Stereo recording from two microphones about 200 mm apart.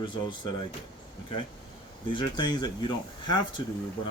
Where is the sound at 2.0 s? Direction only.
20° left (ahead or behind).